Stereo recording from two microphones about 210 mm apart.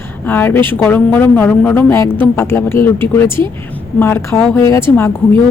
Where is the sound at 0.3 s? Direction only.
10° left (ahead or behind).